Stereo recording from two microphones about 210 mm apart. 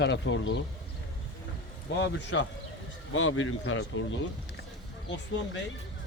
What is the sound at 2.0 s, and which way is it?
Speech, 60° left (ahead or behind).